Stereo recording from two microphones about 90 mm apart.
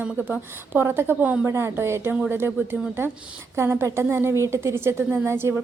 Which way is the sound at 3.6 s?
30° right (ahead or behind).